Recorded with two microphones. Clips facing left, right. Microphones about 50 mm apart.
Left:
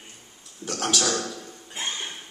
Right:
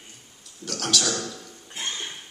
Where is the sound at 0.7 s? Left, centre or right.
Left.